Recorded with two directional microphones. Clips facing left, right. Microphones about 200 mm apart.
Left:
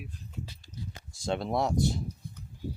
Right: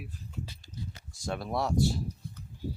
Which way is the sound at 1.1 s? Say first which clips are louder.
Left 4 dB; 25° left (ahead or behind).